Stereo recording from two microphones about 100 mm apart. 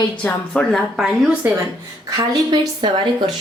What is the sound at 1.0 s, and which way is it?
Speech, 5° right (ahead or behind).